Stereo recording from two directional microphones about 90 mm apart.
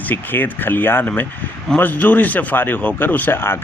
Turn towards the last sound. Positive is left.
turn(degrees=25)  # may be behind; listen again after turning